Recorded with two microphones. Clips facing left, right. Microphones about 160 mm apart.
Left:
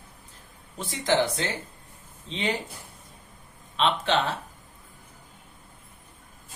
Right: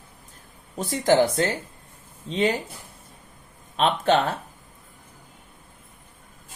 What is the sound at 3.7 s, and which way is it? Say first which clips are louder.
Speech: right 4 dB; 45° right (ahead or behind).